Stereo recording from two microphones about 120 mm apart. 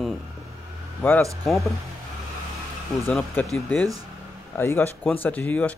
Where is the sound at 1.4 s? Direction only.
Centre (ahead or behind).